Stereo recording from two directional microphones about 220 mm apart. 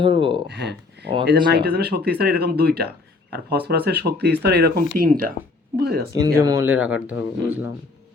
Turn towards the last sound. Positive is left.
turn(degrees=-5)  # may be behind; listen again after turning